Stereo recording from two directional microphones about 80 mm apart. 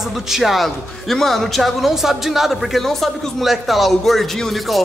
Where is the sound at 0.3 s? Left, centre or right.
Centre.